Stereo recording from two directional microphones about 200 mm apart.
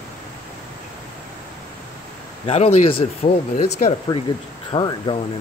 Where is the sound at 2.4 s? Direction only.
30° left (ahead or behind).